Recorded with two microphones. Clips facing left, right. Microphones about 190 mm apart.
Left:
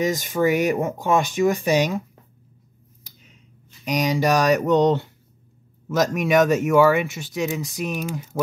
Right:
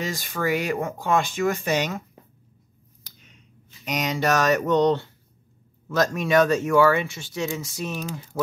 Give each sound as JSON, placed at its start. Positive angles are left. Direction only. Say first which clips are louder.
{"t": 0.0, "sound": "speech", "louder": "left 7 dB", "side_deg": 20}
{"t": 3.8, "sound": "speech", "louder": "left 4 dB", "side_deg": 10}